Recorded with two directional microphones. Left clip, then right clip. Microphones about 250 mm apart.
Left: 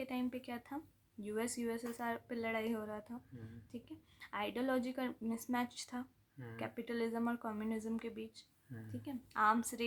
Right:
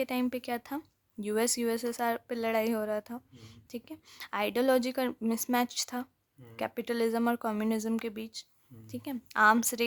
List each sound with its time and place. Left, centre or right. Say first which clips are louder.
0.0 s speech: right 10 dB; right